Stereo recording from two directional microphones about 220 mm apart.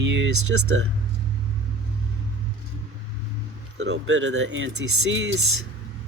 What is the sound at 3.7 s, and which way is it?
Speech, 55° right (ahead or behind).